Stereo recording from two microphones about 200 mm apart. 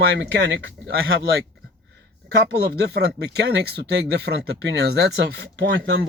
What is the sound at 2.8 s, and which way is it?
Speech, 55° right (ahead or behind).